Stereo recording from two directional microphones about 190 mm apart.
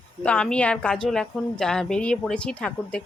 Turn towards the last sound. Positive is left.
turn(degrees=5)  # may be behind; listen again after turning